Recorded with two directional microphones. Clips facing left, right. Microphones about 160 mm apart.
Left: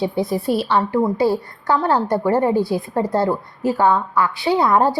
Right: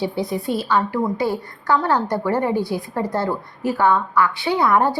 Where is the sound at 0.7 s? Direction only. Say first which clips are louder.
Even; 25° left (ahead or behind).